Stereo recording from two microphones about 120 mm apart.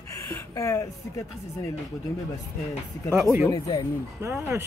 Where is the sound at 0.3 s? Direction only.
25° left (ahead or behind).